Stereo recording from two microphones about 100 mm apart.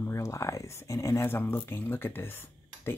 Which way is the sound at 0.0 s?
30° left (ahead or behind).